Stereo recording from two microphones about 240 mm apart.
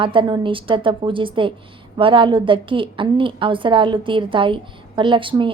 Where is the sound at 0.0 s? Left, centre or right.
Right.